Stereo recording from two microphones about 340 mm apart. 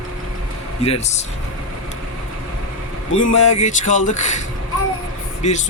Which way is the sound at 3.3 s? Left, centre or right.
Centre.